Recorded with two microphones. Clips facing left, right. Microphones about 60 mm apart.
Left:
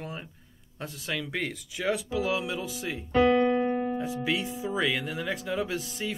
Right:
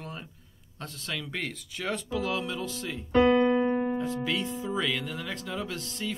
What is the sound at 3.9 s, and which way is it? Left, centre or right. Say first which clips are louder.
Speech: even; centre.